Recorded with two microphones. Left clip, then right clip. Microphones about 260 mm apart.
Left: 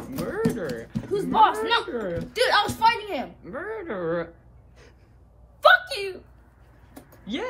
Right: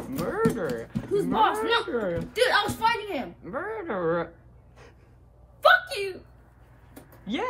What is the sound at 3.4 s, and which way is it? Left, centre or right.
Speech, right.